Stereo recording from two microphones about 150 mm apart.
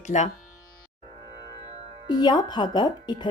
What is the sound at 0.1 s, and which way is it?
Speech, 55° left (ahead or behind).